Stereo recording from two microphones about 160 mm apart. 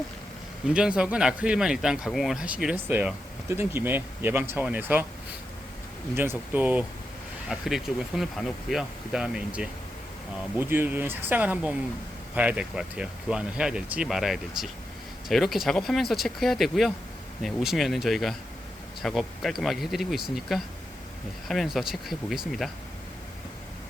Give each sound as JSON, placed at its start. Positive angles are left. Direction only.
{"t": 0.7, "sound": "speech", "side_deg": -5}
{"t": 6.1, "sound": "speech", "side_deg": -10}